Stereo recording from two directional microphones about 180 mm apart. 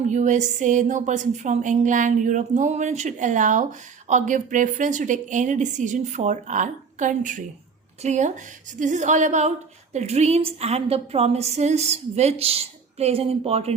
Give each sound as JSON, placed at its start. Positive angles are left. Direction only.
{"t": 0.1, "sound": "a woman's voice", "side_deg": -40}